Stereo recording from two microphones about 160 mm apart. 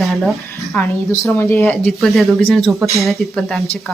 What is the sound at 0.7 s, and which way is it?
Speech, 10° left (ahead or behind).